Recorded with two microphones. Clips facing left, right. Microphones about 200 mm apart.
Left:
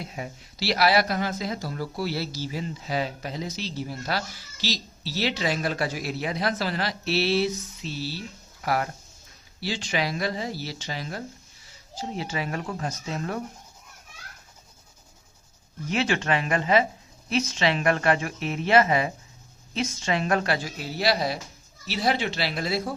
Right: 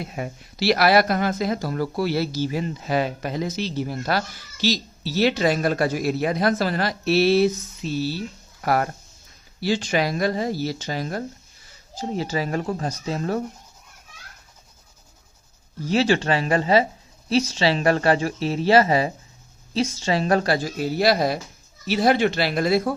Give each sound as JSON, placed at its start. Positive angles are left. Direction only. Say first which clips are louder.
{"t": 0.0, "sound": "speech", "louder": "right 5 dB", "side_deg": -55}
{"t": 15.8, "sound": "speech", "louder": "right 6 dB", "side_deg": -35}